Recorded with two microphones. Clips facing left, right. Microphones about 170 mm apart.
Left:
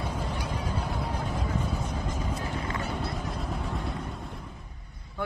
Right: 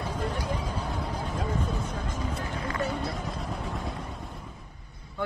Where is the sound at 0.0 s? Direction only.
10° left (ahead or behind).